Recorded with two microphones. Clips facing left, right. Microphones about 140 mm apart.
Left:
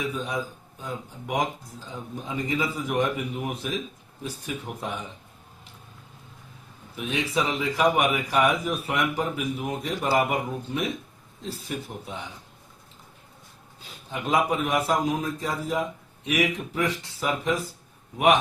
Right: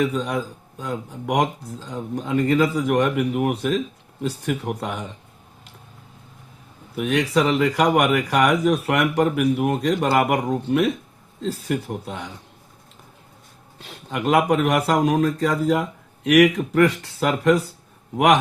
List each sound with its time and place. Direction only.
0.0 s a man's voice: 80° right
6.9 s a man's voice: 70° right (ahead or behind)
13.7 s a man's voice: 75° right (ahead or behind)